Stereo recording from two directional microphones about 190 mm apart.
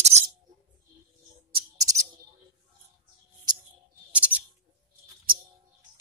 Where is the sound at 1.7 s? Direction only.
20° right (ahead or behind).